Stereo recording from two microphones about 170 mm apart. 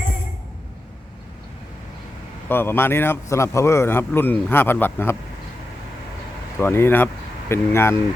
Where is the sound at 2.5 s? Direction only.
15° left (ahead or behind).